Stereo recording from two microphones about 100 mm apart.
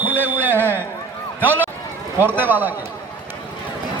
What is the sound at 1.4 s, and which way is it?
Speech, 15° left (ahead or behind).